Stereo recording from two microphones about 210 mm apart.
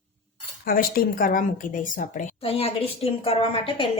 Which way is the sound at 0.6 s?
45° left (ahead or behind).